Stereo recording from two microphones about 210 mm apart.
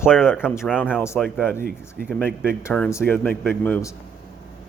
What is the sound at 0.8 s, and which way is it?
Speech, 10° left (ahead or behind).